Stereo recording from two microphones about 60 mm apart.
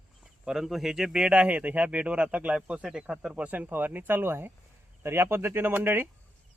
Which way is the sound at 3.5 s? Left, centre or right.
Right.